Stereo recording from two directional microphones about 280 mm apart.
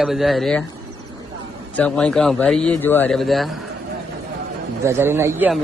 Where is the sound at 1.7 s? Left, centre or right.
Centre.